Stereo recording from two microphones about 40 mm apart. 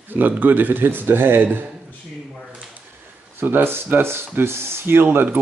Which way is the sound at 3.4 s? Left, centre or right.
Right.